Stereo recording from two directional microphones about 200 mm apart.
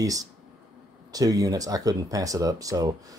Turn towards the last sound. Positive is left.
turn(degrees=-15)  # may be behind; listen again after turning